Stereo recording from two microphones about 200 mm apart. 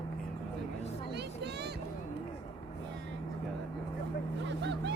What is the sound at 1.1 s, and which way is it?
Vehicle, 55° right (ahead or behind).